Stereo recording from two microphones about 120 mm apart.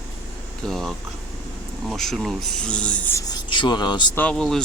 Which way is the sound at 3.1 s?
30° left (ahead or behind).